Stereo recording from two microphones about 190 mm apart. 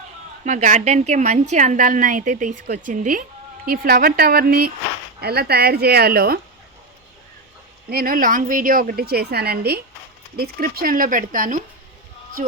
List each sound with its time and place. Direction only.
0.4 s a woman's voice: 40° right (ahead or behind)
7.9 s a woman's voice: 50° right (ahead or behind)